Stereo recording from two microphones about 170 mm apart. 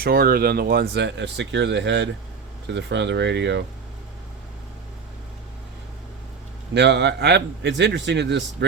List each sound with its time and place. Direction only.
0.0 s a man's voice: 60° right (ahead or behind); by 3.6 s 90° right
6.7 s a man's voice: 90° right